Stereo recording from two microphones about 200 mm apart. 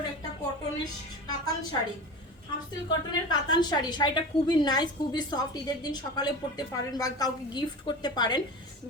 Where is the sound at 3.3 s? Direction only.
20° left (ahead or behind).